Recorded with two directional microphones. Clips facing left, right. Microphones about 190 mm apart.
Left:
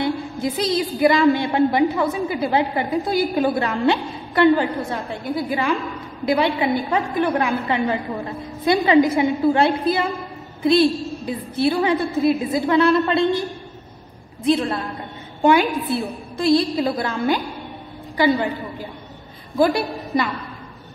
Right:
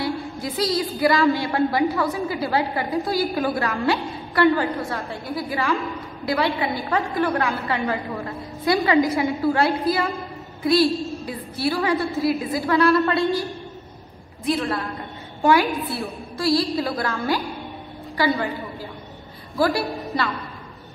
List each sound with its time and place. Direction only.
0.0 s a woman's voice: 20° left (ahead or behind)
19.5 s a woman's voice: 20° left (ahead or behind)